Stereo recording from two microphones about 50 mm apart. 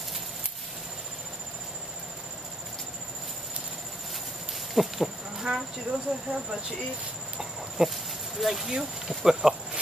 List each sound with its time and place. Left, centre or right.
4.7 s speech: centre
5.5 s speech: centre
7.3 s a sound: centre
9.2 s speech: centre